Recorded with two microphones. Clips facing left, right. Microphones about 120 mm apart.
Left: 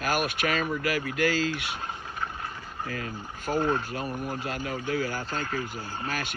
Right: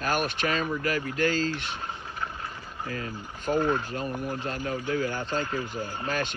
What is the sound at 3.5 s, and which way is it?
Speech, 40° left (ahead or behind).